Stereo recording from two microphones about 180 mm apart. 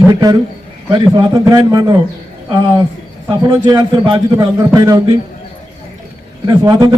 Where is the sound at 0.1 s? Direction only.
20° right (ahead or behind).